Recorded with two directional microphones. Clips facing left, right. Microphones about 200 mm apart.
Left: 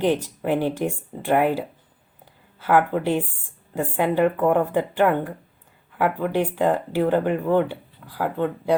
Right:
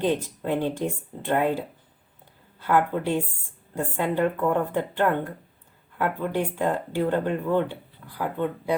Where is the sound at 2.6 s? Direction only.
90° left.